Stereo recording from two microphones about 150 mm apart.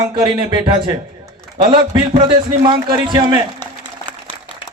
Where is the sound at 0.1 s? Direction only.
30° right (ahead or behind).